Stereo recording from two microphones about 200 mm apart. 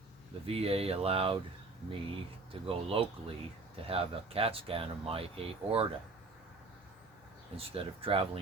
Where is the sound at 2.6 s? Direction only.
30° right (ahead or behind).